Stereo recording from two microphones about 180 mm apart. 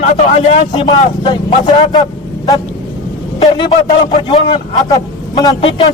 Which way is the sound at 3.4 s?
25° left (ahead or behind).